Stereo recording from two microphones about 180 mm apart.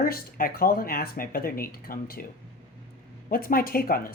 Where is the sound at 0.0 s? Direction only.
55° left (ahead or behind).